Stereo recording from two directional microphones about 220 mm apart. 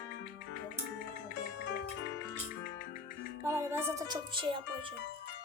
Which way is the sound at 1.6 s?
50° left (ahead or behind).